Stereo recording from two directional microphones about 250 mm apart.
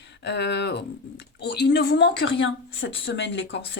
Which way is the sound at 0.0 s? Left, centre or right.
Left.